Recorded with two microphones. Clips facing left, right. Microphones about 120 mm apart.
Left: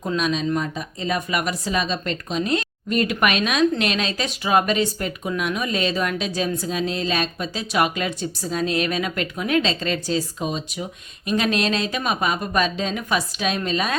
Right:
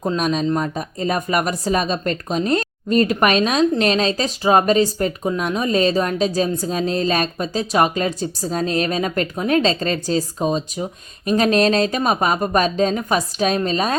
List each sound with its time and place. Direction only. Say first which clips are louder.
0.0 s speech: right 3 dB; 40° right (ahead or behind)